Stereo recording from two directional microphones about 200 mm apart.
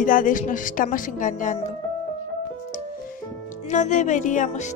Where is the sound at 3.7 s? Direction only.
35° left (ahead or behind).